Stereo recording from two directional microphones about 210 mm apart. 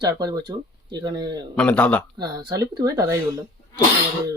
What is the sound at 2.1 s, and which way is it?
Speech, 20° right (ahead or behind).